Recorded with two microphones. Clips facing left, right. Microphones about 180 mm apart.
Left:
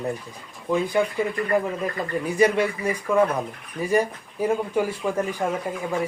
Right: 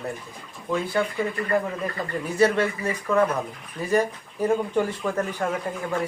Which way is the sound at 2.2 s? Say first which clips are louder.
Left 1 dB; 15° left (ahead or behind).